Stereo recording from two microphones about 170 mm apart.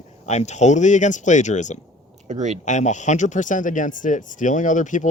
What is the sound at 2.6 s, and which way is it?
Speech, 45° left (ahead or behind).